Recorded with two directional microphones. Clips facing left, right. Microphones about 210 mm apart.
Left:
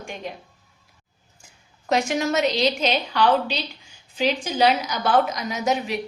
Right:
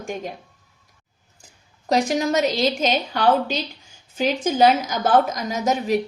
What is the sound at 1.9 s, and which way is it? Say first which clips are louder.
A woman's voice: right 2 dB; 35° right (ahead or behind).